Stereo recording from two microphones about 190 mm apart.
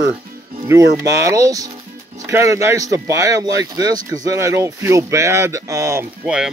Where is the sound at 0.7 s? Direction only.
15° right (ahead or behind).